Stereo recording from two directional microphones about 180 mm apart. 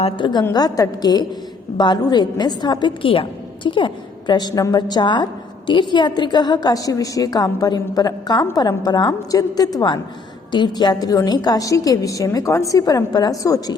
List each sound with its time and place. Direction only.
0.0 s a woman's voice: 25° left (ahead or behind)